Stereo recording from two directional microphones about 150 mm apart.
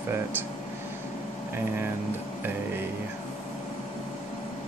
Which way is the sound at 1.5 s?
15° right (ahead or behind).